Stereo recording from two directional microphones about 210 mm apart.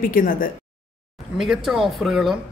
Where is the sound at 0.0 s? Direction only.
40° left (ahead or behind).